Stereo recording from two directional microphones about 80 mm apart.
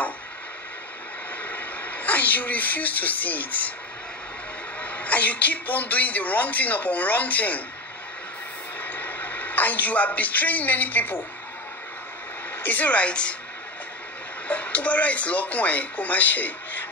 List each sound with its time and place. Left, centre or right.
1.4 s speech: left
4.8 s speech: centre
8.8 s a man's voice: left
12.6 s speech: centre
14.5 s speech: centre